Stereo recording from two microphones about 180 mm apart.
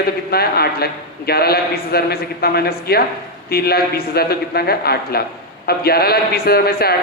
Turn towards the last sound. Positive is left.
turn(degrees=60)  # may be behind; listen again after turning